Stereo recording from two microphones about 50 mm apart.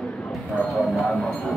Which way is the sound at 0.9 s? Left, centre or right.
Centre.